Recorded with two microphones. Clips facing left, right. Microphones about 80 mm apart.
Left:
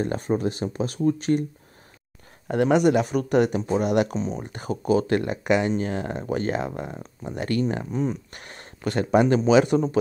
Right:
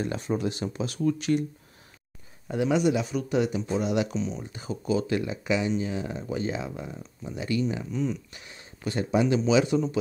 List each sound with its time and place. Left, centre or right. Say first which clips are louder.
0.0 s speech: left 4 dB; left
2.4 s speech: left 5 dB; left